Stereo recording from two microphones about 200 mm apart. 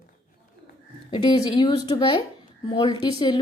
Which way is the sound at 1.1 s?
25° left (ahead or behind).